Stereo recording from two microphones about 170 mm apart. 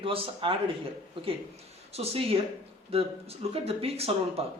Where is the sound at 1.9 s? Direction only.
35° right (ahead or behind).